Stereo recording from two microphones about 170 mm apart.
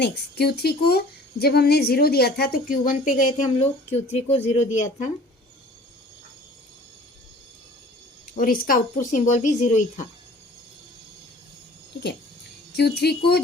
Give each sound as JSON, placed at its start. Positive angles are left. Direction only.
{"t": 0.0, "sound": "speech", "side_deg": 70}
{"t": 8.4, "sound": "speech", "side_deg": 55}
{"t": 12.7, "sound": "speech", "side_deg": 75}